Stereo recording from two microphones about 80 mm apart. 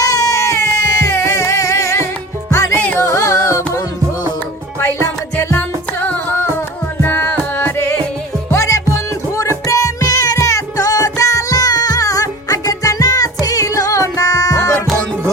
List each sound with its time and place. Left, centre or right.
0.0 s music: left
4.8 s music: left
6.0 s music: left